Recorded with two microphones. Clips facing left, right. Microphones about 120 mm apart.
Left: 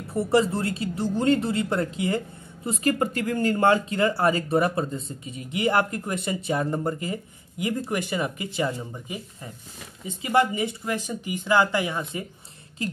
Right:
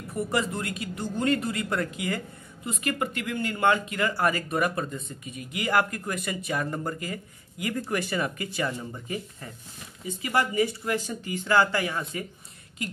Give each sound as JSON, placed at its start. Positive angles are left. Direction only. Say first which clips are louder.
{"t": 0.1, "sound": "speech", "louder": "left 6 dB", "side_deg": 30}